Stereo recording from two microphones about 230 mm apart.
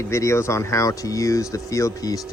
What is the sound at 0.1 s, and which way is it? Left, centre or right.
Speech, centre.